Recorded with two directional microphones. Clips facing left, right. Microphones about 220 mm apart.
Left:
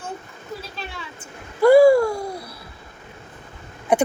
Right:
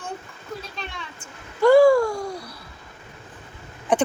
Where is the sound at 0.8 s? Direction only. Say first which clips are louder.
Left 1 dB; 5° left (ahead or behind).